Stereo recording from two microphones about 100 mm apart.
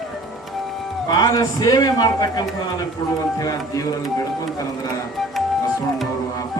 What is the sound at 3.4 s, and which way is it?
Speech, 35° left (ahead or behind).